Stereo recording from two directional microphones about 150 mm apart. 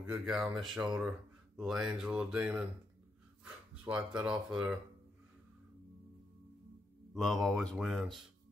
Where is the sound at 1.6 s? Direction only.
5° right (ahead or behind).